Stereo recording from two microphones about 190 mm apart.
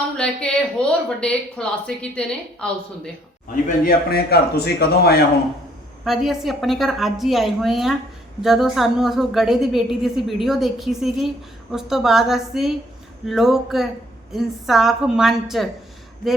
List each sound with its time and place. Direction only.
0.2 s a woman's voice: 5° left (ahead or behind)
3.5 s speech: 55° left (ahead or behind)
6.1 s a woman's voice: centre (ahead or behind)